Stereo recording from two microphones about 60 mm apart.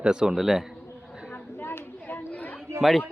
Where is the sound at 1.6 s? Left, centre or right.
Left.